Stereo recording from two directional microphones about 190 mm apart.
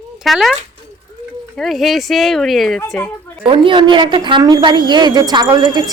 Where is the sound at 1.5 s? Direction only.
Centre (ahead or behind).